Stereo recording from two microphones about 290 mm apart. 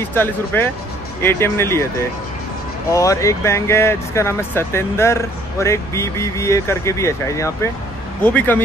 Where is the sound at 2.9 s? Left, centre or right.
Centre.